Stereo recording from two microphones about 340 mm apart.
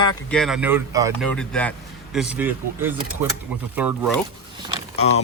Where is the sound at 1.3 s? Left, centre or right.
Centre.